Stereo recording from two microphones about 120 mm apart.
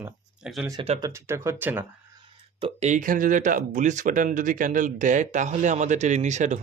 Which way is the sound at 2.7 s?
80° right.